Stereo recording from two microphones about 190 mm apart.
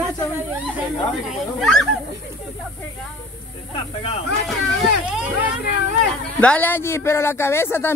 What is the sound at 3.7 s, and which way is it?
Speech, 30° left (ahead or behind).